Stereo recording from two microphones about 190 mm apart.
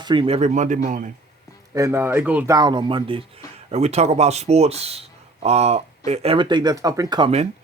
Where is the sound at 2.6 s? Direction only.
25° right (ahead or behind).